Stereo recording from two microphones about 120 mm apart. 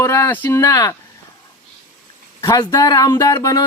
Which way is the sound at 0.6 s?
30° left (ahead or behind).